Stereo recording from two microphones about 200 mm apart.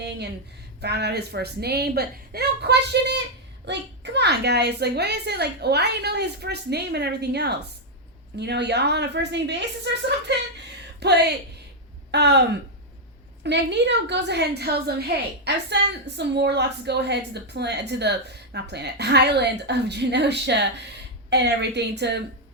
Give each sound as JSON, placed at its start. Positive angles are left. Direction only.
{"t": 0.8, "sound": "a woman's voice", "side_deg": -55}
{"t": 13.4, "sound": "a woman's voice", "side_deg": -60}